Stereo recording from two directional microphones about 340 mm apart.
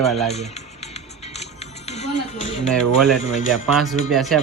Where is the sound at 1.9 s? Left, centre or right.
Centre.